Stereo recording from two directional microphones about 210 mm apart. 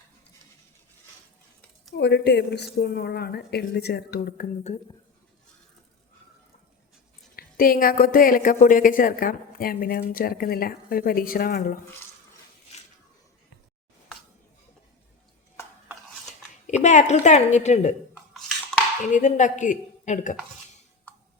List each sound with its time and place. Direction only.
2.0 s speech: 55° left (ahead or behind); by 4.8 s 35° left (ahead or behind)
7.3 s speech: 45° left (ahead or behind)
16.6 s a woman's voice: 35° left (ahead or behind)
19.1 s a woman's voice: 35° left (ahead or behind)